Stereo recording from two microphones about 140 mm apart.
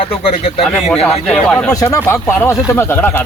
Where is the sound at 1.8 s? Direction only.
20° left (ahead or behind).